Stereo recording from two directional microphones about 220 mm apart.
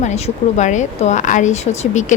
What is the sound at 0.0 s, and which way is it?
Speech, 30° left (ahead or behind).